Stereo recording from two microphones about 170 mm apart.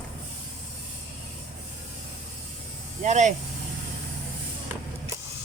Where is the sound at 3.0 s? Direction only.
45° right (ahead or behind).